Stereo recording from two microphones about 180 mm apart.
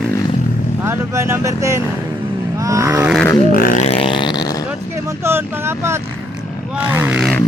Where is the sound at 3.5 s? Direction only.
50° left (ahead or behind); by 4.7 s 20° left (ahead or behind).